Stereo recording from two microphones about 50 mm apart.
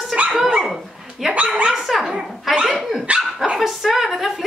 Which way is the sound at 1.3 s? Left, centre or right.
Right.